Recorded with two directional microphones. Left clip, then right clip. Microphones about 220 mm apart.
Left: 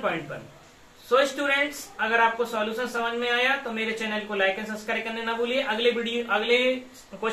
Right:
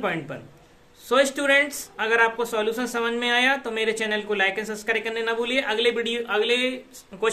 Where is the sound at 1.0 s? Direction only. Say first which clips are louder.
Right 2 dB; 65° right (ahead or behind).